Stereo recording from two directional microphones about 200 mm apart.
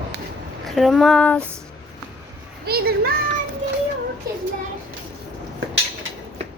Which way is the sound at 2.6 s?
50° right (ahead or behind).